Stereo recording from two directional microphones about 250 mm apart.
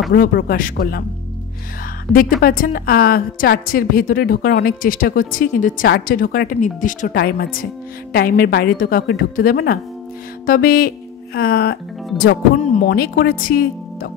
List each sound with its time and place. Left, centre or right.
0.1 s a woman's voice: left
2.4 s a woman's voice: left